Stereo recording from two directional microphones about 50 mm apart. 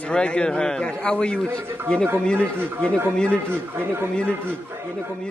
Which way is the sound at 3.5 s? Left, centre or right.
Right.